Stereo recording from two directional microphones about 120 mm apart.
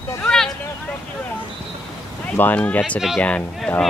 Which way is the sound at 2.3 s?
15° left (ahead or behind).